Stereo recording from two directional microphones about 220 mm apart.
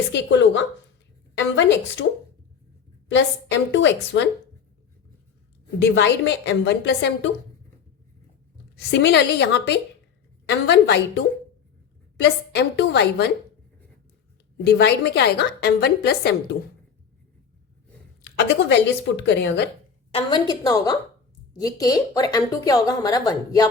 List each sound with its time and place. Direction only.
0.1 s a woman's voice: 55° left (ahead or behind)
3.5 s a woman's voice: 55° left (ahead or behind)
5.8 s a woman's voice: 55° left (ahead or behind)
8.9 s a woman's voice: 50° left (ahead or behind)
14.6 s a woman's voice: 50° left (ahead or behind)
18.2 s a woman's voice: 50° left (ahead or behind)
20.1 s speech: 25° left (ahead or behind)